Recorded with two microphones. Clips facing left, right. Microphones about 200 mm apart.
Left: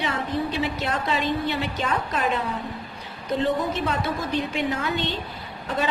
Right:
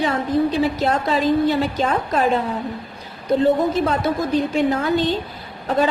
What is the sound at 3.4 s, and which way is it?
A woman's voice, 40° right (ahead or behind).